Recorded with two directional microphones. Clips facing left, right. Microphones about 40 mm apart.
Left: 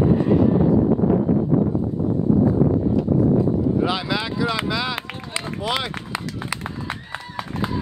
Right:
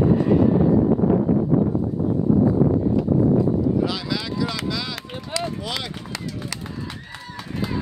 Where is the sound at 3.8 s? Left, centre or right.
Left.